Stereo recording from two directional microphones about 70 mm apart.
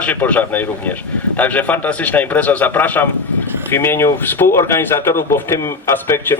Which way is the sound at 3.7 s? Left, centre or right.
Left.